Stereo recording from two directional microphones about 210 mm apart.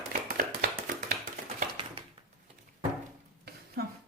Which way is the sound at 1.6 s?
25° right (ahead or behind).